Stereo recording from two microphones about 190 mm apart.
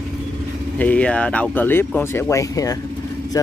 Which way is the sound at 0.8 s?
5° left (ahead or behind).